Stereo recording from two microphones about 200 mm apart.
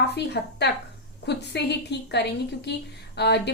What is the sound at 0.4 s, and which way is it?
A woman's voice, 50° left (ahead or behind).